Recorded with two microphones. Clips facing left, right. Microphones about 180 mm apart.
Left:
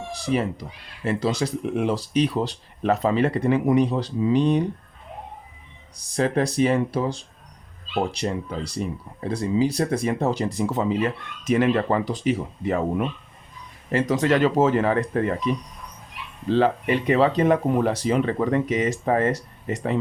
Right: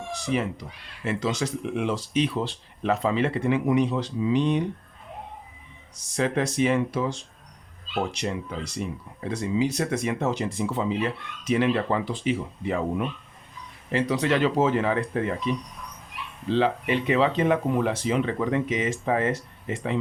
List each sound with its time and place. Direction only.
0.1 s speech: 35° left (ahead or behind)
6.0 s speech: 35° left (ahead or behind)